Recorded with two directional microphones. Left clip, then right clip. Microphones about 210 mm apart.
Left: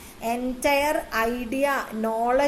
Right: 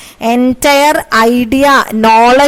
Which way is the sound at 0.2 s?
45° right (ahead or behind).